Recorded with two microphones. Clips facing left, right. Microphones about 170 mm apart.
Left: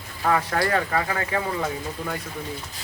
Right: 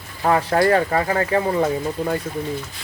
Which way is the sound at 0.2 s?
35° right (ahead or behind).